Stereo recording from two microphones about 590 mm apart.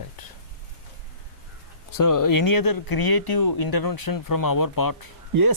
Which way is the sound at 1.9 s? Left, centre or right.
Left.